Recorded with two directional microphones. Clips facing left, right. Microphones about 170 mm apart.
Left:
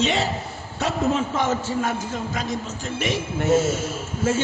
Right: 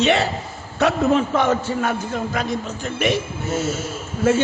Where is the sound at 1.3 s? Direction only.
60° right (ahead or behind).